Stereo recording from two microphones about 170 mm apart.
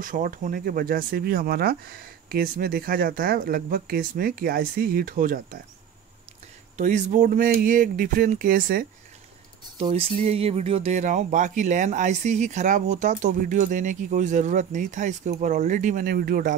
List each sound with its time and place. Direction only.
0.0 s speech: 55° right (ahead or behind)
6.8 s speech: 45° right (ahead or behind)
9.8 s speech: 35° right (ahead or behind); by 16.5 s 55° right (ahead or behind)